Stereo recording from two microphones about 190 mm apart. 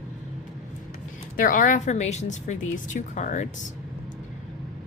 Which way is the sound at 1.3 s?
45° left (ahead or behind).